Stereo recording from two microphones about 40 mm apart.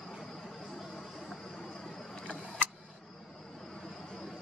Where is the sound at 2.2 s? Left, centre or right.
Left.